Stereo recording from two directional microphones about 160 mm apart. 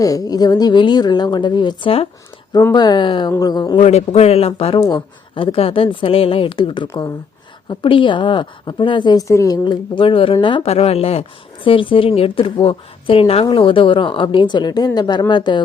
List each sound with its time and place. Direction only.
0.0 s speech: 20° left (ahead or behind)
3.8 s a woman's voice: 45° left (ahead or behind)
4.8 s a woman's voice: 25° left (ahead or behind)
6.8 s speech: 20° left (ahead or behind)
7.7 s a woman's voice: 30° left (ahead or behind)